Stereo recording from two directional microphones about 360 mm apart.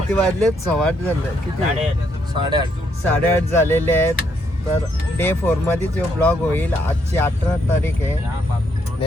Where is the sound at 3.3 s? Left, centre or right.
Centre.